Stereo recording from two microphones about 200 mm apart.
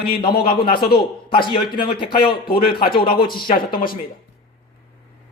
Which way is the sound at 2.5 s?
25° left (ahead or behind).